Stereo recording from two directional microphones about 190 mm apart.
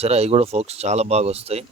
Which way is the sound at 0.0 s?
35° right (ahead or behind).